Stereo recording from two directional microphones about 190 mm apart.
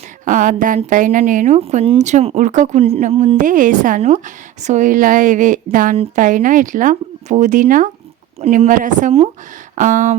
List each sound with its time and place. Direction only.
0.3 s speech: 45° right (ahead or behind)